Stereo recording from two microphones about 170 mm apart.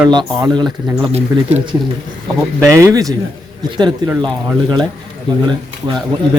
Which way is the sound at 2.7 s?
20° right (ahead or behind).